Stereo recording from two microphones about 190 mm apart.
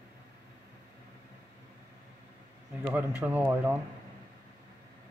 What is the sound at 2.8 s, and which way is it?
Speech, 10° right (ahead or behind).